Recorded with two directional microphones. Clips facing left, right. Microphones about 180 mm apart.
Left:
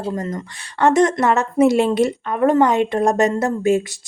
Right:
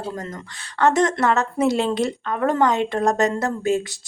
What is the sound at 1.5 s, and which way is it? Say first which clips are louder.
Speech: left 5 dB; 5° left (ahead or behind).